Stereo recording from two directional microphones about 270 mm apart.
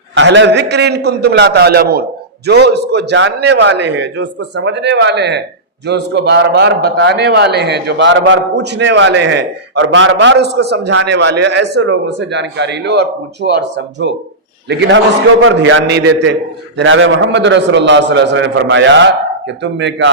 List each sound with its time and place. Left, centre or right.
0.1 s a man's voice: right